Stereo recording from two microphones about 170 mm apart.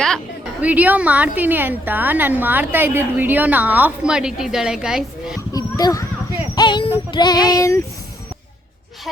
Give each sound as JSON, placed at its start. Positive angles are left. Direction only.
{"t": 0.6, "sound": "a woman's voice", "side_deg": -10}
{"t": 5.5, "sound": "a sound", "side_deg": 20}
{"t": 7.1, "sound": "child singing", "side_deg": 25}